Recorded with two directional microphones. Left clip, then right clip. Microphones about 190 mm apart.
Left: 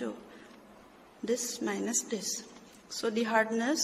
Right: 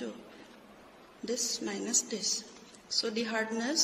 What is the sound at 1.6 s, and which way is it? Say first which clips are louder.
Speech: left 3 dB; 35° left (ahead or behind).